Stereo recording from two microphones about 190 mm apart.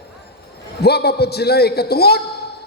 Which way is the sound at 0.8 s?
60° left (ahead or behind).